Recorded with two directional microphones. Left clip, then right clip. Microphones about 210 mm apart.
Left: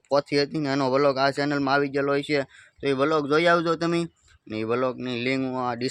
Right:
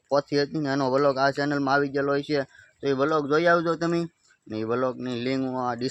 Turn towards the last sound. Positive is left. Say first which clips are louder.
# left 1 dB
turn(degrees=10)  # may be behind; listen again after turning